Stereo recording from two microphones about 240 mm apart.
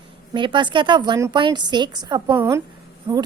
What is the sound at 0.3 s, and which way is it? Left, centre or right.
A woman's voice, centre.